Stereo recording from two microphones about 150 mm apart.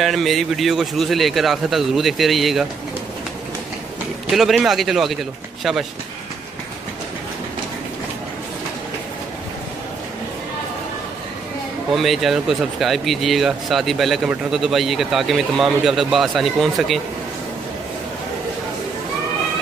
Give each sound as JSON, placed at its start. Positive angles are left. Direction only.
{"t": 0.0, "sound": "a man's voice", "side_deg": 0}
{"t": 4.3, "sound": "a man's voice", "side_deg": -5}
{"t": 11.9, "sound": "a man's voice", "side_deg": 0}